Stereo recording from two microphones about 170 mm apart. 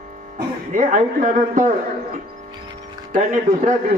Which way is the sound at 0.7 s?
50° right (ahead or behind).